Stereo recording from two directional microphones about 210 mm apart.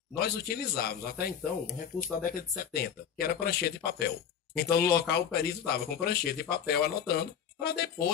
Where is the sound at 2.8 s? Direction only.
45° left (ahead or behind).